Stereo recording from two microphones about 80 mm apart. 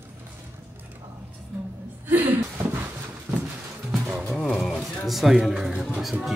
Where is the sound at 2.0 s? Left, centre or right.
Right.